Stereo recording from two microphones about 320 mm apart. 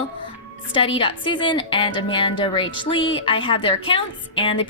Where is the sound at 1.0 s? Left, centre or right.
Centre.